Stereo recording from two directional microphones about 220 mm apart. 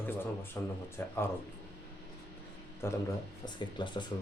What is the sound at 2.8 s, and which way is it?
Speech, 10° left (ahead or behind).